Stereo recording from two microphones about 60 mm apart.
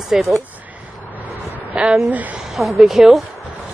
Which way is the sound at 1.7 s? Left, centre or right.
Centre.